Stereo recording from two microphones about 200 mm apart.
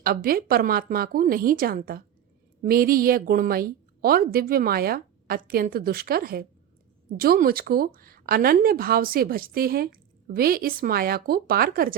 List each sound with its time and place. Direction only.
0.0 s speech: 45° right (ahead or behind)